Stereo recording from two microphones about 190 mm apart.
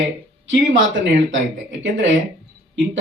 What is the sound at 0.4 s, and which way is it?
Speech, 75° right (ahead or behind).